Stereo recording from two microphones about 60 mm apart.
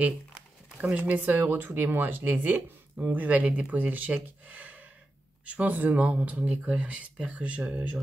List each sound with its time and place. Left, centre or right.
0.7 s speech: right